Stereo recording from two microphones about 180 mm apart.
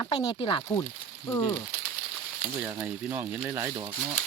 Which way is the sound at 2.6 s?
10° right (ahead or behind).